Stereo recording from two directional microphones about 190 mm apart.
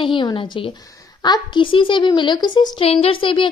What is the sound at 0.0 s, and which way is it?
A woman's voice, 25° left (ahead or behind).